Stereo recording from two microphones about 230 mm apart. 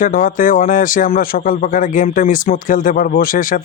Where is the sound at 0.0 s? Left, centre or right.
Left.